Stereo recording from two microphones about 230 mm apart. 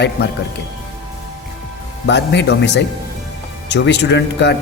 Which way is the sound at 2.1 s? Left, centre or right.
Left.